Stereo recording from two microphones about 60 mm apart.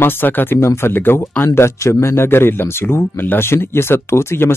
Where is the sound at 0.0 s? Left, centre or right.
Left.